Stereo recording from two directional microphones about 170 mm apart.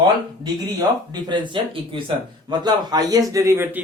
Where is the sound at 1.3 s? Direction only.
25° right (ahead or behind).